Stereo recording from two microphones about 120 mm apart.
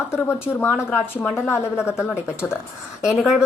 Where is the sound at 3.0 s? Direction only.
10° right (ahead or behind).